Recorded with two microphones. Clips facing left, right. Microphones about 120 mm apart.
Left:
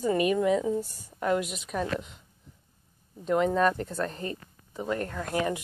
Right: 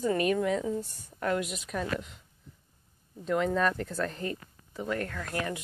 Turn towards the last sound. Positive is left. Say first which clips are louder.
# left 2 dB
turn(degrees=25)  # may be behind; listen again after turning